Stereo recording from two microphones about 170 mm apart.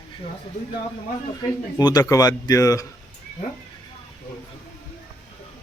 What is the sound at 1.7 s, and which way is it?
Speech, 20° left (ahead or behind).